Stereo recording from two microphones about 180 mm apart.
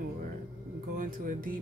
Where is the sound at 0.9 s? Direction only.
50° right (ahead or behind).